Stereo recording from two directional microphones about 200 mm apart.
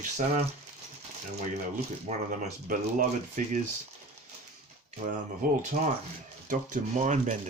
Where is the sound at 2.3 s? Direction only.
40° right (ahead or behind).